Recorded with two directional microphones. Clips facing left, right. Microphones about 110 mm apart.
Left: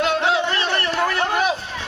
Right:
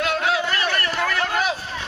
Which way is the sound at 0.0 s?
25° left (ahead or behind).